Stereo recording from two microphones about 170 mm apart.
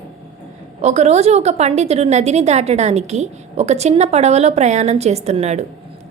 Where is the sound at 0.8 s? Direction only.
40° right (ahead or behind).